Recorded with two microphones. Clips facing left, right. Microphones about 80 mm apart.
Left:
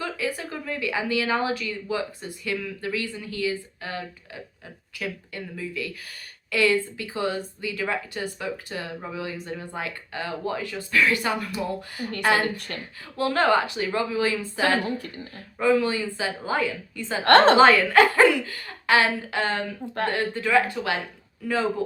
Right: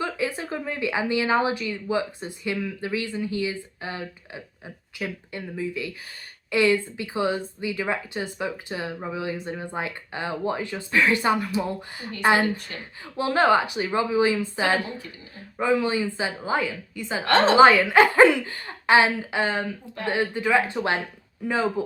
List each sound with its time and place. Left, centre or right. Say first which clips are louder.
0.0 s speech: right 2 dB; right
16.6 s speech: left 1 dB; centre
17.2 s a woman's voice: left 4 dB; left
17.6 s speech: right 1 dB; centre